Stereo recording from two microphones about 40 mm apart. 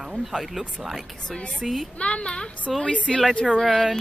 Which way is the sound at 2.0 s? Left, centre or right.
Left.